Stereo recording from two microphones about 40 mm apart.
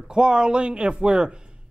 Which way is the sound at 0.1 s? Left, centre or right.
Right.